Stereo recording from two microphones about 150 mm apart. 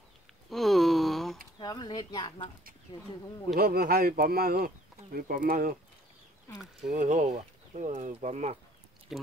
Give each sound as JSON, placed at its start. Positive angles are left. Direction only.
{"t": 0.5, "sound": "a sound", "side_deg": 0}
{"t": 1.6, "sound": "speech", "side_deg": 30}
{"t": 3.5, "sound": "speech", "side_deg": -85}
{"t": 6.8, "sound": "speech", "side_deg": -55}
{"t": 9.1, "sound": "speech", "side_deg": 0}